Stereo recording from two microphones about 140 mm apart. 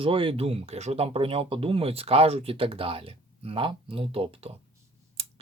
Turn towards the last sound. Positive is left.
turn(degrees=-45)  # may be behind; listen again after turning